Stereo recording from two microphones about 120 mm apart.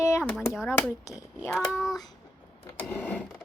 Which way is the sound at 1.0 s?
25° left (ahead or behind).